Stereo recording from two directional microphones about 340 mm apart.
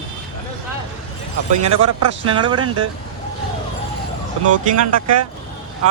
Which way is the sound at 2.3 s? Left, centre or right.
Centre.